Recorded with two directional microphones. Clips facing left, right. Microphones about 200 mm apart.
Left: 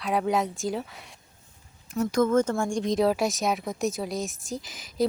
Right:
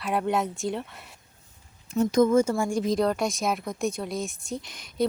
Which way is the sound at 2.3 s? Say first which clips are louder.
Right 1 dB; 10° right (ahead or behind).